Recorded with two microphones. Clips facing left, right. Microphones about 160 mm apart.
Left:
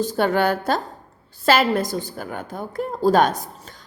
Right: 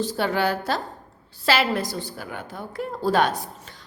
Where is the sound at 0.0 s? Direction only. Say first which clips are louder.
Left 4 dB; 50° left (ahead or behind).